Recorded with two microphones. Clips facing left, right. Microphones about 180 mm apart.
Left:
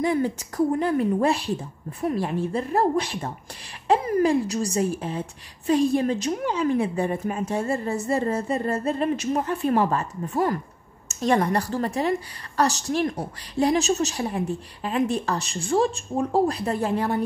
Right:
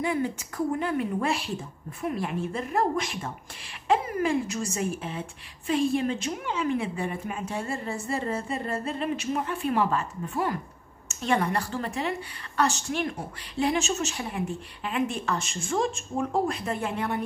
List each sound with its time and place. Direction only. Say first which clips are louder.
0.0 s a woman's voice: left 4 dB; 40° left (ahead or behind)